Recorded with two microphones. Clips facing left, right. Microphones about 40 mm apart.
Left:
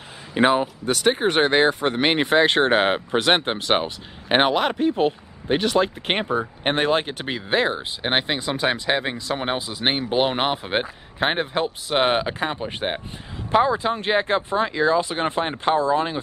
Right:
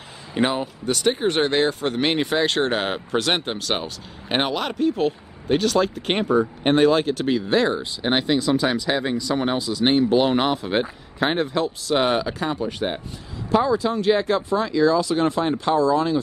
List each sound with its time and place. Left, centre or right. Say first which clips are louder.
0.3 s speech: left 4 dB; centre